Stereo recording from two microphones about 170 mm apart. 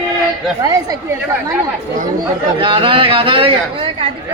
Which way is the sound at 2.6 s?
30° right (ahead or behind).